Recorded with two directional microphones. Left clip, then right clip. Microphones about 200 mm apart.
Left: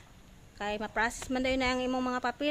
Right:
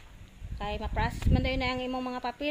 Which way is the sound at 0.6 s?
15° left (ahead or behind).